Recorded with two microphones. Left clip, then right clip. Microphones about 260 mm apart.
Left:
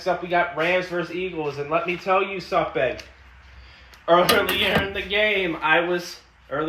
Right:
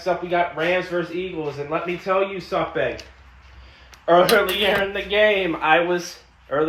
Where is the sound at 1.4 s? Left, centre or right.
Left.